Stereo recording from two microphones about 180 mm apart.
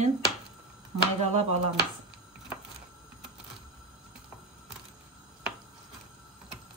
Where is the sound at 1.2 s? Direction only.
40° right (ahead or behind).